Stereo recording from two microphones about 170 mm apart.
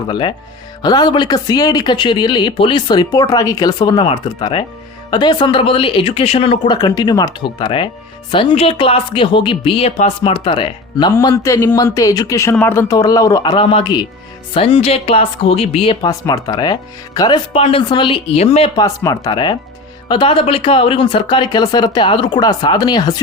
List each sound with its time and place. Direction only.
0.1 s speech: 30° left (ahead or behind)
6.7 s speech: 25° left (ahead or behind)
16.0 s speech: 20° left (ahead or behind); by 18.7 s 35° left (ahead or behind)
18.8 s speech: 20° left (ahead or behind)